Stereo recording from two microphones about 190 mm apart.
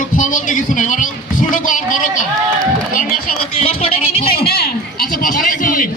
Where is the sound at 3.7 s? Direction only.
30° left (ahead or behind).